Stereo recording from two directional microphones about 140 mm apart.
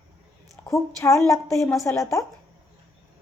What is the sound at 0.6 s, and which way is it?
A woman's voice, 20° left (ahead or behind).